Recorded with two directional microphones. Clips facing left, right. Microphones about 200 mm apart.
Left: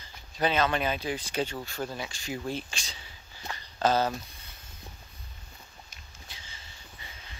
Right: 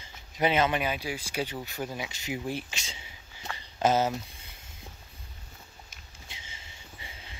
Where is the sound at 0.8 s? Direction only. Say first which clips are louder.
Left 1 dB; 10° right (ahead or behind).